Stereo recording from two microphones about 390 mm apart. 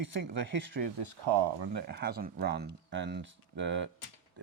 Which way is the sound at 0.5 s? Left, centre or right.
Right.